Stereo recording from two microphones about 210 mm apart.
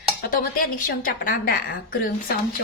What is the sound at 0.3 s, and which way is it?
Speech, 40° left (ahead or behind).